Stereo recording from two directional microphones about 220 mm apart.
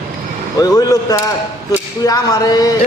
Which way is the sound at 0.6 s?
15° left (ahead or behind).